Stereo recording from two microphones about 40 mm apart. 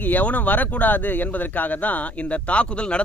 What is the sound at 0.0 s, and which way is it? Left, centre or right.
Speech, left.